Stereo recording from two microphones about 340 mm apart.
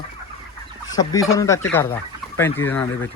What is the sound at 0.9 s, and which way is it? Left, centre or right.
Speech, centre.